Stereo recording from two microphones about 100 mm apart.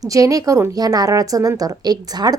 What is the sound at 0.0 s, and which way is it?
A woman's voice, 35° right (ahead or behind).